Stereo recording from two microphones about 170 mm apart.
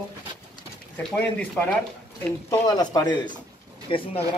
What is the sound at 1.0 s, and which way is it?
Speech, 5° left (ahead or behind).